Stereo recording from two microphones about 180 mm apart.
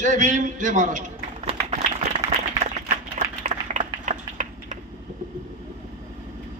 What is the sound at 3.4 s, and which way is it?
Typing, 45° right (ahead or behind).